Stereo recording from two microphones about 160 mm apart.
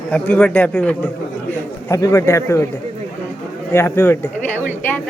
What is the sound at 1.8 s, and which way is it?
Speech, 20° left (ahead or behind).